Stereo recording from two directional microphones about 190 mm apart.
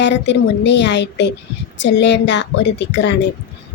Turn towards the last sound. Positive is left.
turn(degrees=65)  # may be behind; listen again after turning